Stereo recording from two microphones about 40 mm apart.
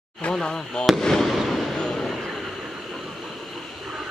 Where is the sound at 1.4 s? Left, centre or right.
Centre.